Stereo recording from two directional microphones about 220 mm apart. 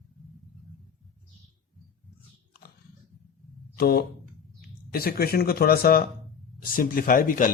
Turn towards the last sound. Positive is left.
turn(degrees=40)  # may be behind; listen again after turning